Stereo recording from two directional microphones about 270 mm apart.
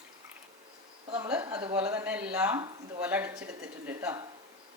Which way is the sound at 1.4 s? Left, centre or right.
Centre.